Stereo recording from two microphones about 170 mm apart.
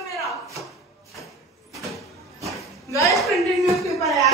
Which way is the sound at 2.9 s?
20° left (ahead or behind).